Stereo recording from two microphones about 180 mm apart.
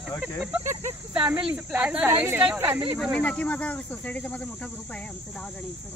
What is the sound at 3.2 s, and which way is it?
Speech, 10° left (ahead or behind).